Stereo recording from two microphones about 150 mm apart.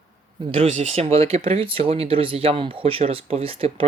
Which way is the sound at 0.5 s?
40° right (ahead or behind).